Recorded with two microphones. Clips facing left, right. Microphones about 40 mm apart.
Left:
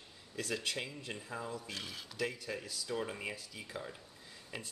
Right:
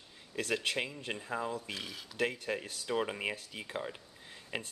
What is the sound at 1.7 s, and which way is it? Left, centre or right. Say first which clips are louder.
Speech: right 2 dB; centre.